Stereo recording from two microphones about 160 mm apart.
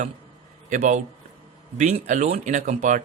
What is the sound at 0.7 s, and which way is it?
Speech, 45° right (ahead or behind).